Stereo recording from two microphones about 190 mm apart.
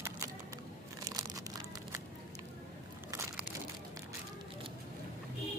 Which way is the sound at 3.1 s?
15° right (ahead or behind).